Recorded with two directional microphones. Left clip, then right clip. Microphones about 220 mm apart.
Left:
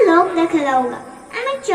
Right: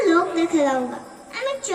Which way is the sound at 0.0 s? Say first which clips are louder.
Left 6 dB; 60° right (ahead or behind).